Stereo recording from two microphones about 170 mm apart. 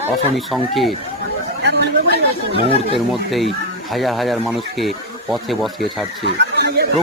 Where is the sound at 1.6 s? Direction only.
75° right (ahead or behind).